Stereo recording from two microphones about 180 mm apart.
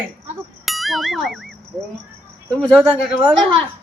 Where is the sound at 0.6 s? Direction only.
Centre (ahead or behind).